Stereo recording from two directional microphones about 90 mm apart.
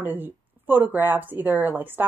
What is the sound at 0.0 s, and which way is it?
A woman's voice, 20° right (ahead or behind).